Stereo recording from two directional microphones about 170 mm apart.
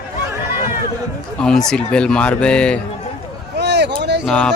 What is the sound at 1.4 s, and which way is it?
Speech, 5° left (ahead or behind).